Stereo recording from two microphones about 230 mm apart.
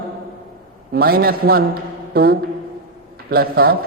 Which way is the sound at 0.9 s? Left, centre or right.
Right.